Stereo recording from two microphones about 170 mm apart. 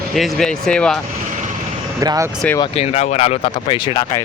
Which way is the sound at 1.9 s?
20° right (ahead or behind).